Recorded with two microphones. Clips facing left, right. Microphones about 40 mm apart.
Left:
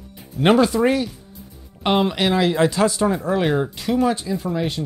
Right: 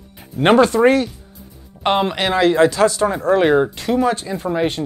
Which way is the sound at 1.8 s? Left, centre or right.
Centre.